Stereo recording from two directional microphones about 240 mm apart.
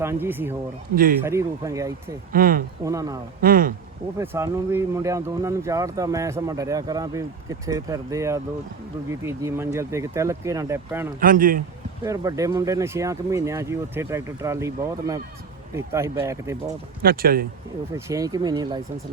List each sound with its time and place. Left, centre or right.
0.0 s speech: centre
0.9 s a man's voice: right
1.2 s speech: centre
2.3 s a man's voice: right
2.8 s speech: centre
3.4 s a sound: right
4.2 s speech: centre
11.2 s a man's voice: right
12.0 s speech: centre
17.0 s a man's voice: right
17.9 s speech: centre